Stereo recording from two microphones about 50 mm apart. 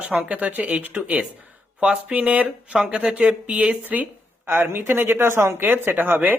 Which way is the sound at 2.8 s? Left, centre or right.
Centre.